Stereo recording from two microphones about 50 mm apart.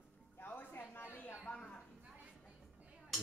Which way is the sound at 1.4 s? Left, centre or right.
Left.